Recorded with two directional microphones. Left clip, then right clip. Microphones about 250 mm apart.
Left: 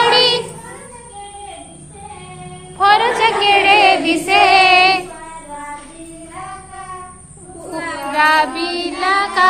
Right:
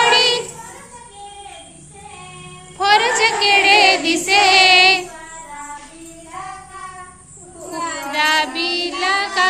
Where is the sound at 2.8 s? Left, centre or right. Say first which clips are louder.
Left 2 dB; right.